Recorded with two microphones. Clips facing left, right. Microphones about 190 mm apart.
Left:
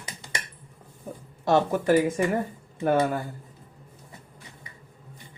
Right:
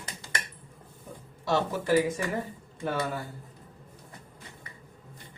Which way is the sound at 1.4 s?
50° left (ahead or behind).